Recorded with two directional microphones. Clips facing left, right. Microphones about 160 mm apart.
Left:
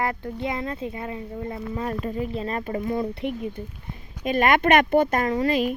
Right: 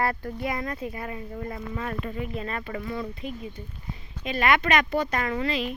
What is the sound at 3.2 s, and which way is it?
Speech, 60° left (ahead or behind).